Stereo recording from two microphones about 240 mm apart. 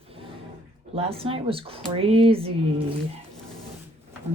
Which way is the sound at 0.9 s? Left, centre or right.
Right.